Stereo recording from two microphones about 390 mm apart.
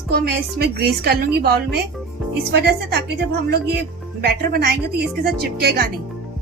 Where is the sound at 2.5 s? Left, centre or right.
Right.